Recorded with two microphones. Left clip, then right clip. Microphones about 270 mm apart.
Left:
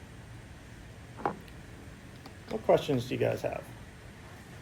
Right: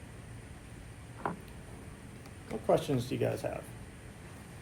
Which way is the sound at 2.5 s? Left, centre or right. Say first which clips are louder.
Left 3 dB; centre.